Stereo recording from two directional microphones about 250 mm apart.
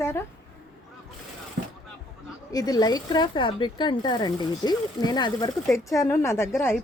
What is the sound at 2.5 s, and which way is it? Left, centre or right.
Speech, centre.